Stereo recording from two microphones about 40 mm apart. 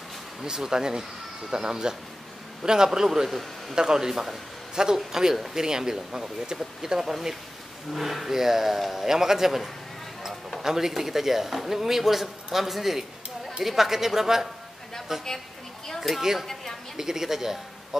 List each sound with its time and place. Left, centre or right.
0.4 s speech: centre
10.6 s speech: centre